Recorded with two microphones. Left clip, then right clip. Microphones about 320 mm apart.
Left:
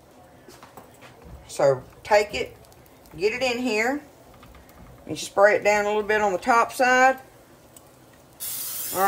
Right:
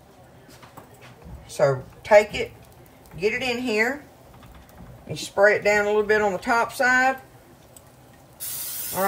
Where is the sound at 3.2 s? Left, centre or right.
Centre.